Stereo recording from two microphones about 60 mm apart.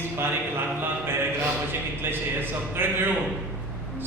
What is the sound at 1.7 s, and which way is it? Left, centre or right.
A man's voice, right.